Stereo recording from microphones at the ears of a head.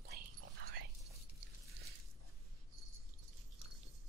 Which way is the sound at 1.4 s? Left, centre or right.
Right.